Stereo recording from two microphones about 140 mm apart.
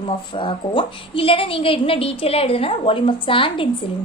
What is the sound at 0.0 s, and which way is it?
A woman's voice, 40° left (ahead or behind).